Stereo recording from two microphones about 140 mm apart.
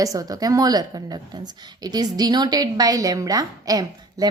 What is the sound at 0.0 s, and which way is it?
A woman's voice, 25° right (ahead or behind).